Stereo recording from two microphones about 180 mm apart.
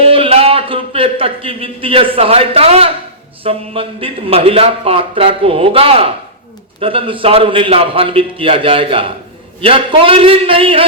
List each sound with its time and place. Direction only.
0.0 s a man's voice: 30° right (ahead or behind)